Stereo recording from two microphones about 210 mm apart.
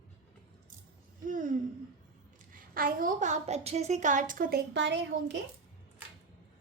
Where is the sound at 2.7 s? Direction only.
40° right (ahead or behind); by 5.4 s 55° right (ahead or behind).